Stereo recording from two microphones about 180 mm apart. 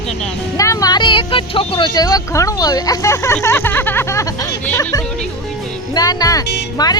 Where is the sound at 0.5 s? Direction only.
20° left (ahead or behind).